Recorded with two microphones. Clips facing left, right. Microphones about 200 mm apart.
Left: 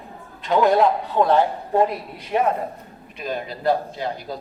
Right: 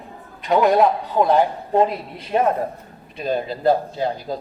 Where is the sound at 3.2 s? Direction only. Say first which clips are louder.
Right 4 dB; 35° right (ahead or behind).